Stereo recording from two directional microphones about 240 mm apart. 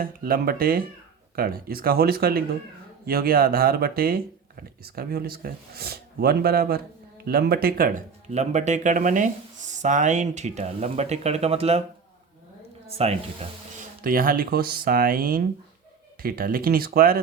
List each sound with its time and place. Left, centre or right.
0.0 s speech: right
13.0 s speech: right
14.0 s speech: right